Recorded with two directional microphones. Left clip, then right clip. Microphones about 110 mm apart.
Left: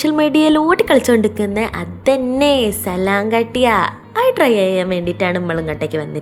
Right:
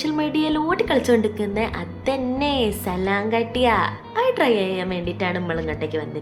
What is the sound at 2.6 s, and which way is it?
A woman's voice, 55° left (ahead or behind).